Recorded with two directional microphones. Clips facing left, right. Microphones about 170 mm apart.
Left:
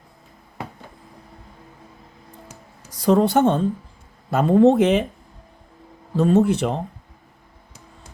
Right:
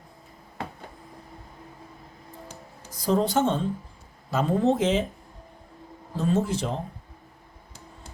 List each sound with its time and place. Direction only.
2.9 s speech: 70° left (ahead or behind)
6.1 s speech: 65° left (ahead or behind)